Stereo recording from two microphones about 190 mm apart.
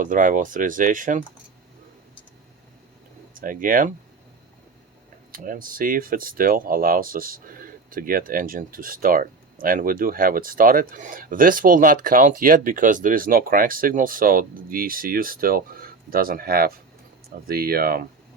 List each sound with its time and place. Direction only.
0.0 s speech: 45° right (ahead or behind)
3.3 s speech: 45° right (ahead or behind)
5.3 s speech: 50° right (ahead or behind)